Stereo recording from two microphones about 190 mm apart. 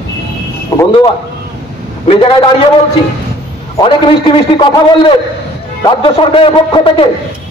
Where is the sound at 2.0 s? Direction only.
30° left (ahead or behind).